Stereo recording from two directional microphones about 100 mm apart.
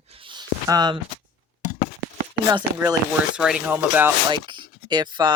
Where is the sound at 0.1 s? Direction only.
60° right (ahead or behind).